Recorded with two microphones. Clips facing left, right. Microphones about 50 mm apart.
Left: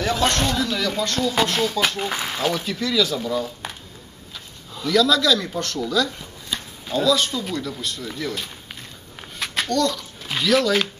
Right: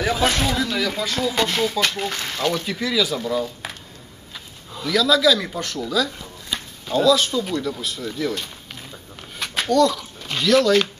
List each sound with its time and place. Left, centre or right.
0.0 s speech: centre
2.6 s speech: centre
4.7 s speech: centre
9.4 s a sound: centre
10.2 s speech: centre